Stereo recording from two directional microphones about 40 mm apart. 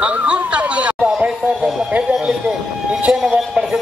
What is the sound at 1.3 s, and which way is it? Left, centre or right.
Speech, centre.